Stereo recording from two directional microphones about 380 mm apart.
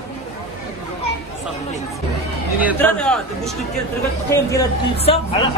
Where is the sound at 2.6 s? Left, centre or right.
Centre.